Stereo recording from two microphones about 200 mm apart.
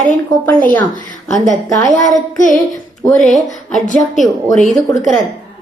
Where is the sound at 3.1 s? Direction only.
Centre (ahead or behind).